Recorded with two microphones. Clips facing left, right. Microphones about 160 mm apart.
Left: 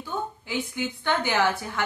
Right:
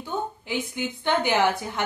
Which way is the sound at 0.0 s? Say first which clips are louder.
Right 2 dB; 20° right (ahead or behind).